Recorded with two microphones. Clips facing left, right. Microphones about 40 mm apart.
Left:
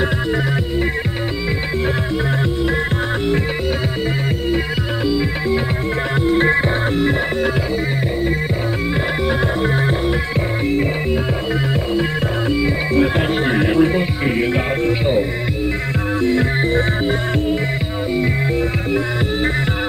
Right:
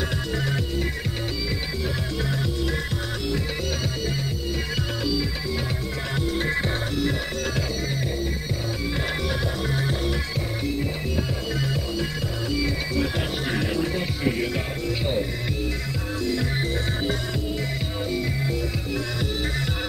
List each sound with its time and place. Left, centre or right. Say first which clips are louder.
5.0 s music: left 10 dB; left
9.6 s music: left 8 dB; left
11.9 s music: left 9 dB; left